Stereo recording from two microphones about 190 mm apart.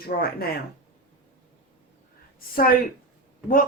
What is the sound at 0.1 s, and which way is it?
Speech, 50° left (ahead or behind).